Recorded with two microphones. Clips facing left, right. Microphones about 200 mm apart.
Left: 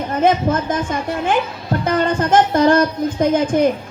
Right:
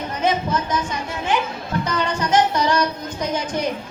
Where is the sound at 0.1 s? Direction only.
50° left (ahead or behind).